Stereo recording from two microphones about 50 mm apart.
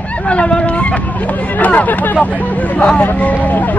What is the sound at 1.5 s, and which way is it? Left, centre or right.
Speech, left.